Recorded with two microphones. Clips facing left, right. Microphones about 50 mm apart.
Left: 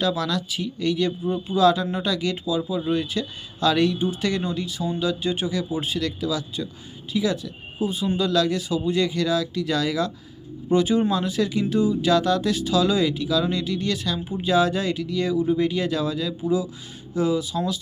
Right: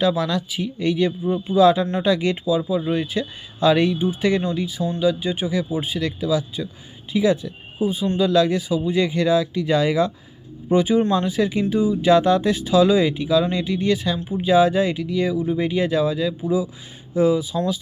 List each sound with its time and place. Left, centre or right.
0.0 s speech: centre
4.8 s speech: centre; by 10.1 s right
10.7 s speech: centre
12.1 s speech: right